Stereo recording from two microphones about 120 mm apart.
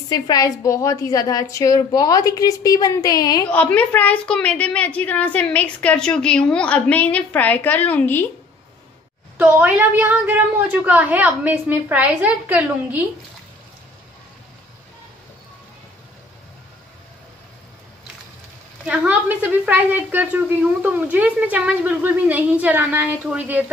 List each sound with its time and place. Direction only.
0.1 s a woman's voice: 30° left (ahead or behind)
3.5 s a woman's voice: 15° left (ahead or behind)
9.4 s a woman's voice: 10° right (ahead or behind)
18.9 s a woman's voice: 15° right (ahead or behind)